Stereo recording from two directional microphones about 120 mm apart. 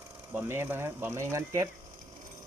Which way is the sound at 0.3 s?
20° right (ahead or behind).